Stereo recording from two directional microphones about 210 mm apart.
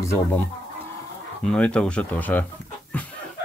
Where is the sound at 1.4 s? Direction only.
5° left (ahead or behind).